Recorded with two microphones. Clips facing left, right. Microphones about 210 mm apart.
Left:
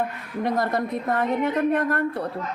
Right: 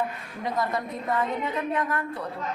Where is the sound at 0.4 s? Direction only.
65° left (ahead or behind).